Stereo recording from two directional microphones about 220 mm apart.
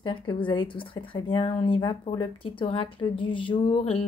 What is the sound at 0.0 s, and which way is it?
Speech, 25° left (ahead or behind).